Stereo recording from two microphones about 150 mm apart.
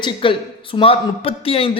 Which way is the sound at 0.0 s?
35° left (ahead or behind).